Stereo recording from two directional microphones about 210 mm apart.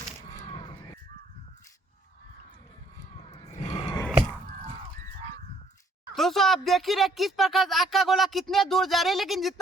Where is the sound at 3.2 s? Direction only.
30° left (ahead or behind).